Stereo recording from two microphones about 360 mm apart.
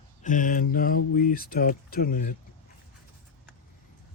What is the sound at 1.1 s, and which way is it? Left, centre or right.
Speech, left.